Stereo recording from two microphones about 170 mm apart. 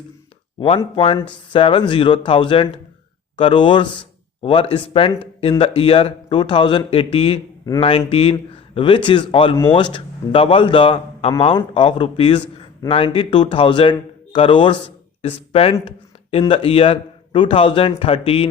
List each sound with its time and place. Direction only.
0.9 s a man's voice: 35° left (ahead or behind)